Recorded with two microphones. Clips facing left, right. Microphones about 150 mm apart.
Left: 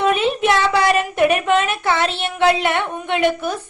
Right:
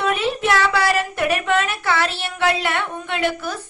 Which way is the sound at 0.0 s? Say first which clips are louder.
Left 4 dB; 20° left (ahead or behind).